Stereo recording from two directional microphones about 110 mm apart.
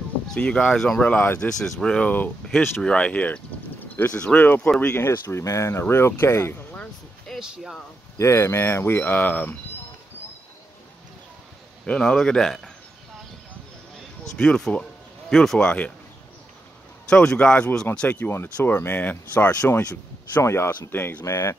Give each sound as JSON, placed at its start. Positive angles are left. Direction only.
{"t": 0.3, "sound": "speech", "side_deg": 5}
{"t": 6.7, "sound": "a sound", "side_deg": 10}
{"t": 7.3, "sound": "speech", "side_deg": -5}
{"t": 8.2, "sound": "speech", "side_deg": 25}
{"t": 11.8, "sound": "speech", "side_deg": 10}
{"t": 14.3, "sound": "speech", "side_deg": 10}
{"t": 17.1, "sound": "speech", "side_deg": 5}
{"t": 20.4, "sound": "speech", "side_deg": 25}